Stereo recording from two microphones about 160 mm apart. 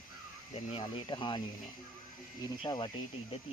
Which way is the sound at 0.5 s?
35° left (ahead or behind).